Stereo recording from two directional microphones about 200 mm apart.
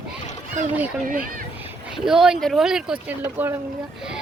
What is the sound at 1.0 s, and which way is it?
Speech, 45° right (ahead or behind).